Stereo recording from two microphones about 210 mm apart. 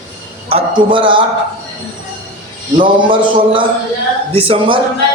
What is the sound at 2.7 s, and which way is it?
Speech, 25° right (ahead or behind).